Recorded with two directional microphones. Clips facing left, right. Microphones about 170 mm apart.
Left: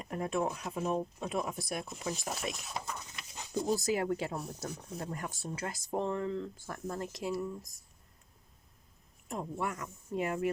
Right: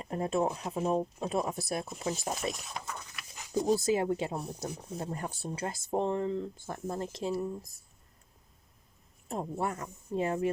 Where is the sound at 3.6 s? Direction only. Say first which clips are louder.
Right 3 dB; 25° right (ahead or behind).